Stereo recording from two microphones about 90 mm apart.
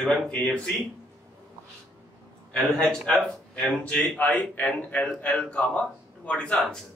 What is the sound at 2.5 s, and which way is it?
Speech, 10° left (ahead or behind).